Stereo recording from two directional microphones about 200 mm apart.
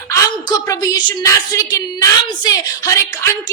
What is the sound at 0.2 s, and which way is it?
A woman's voice, 15° left (ahead or behind).